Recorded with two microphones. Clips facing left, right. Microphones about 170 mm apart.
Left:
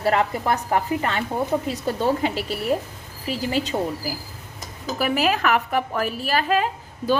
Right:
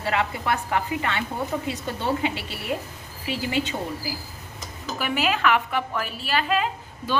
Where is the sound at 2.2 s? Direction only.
40° left (ahead or behind).